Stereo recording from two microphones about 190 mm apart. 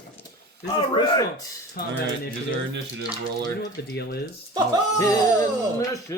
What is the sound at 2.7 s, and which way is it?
Speech, 70° right (ahead or behind).